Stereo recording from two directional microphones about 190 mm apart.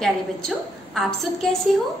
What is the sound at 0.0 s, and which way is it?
A woman's voice, centre (ahead or behind).